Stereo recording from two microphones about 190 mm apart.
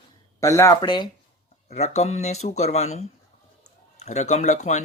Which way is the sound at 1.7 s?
35° left (ahead or behind).